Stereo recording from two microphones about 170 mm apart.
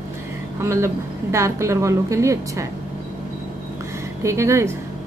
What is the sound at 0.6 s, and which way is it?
A woman's voice, 15° right (ahead or behind).